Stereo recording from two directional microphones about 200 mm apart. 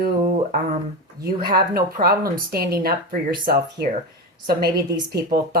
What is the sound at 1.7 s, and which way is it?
Speech, 50° right (ahead or behind).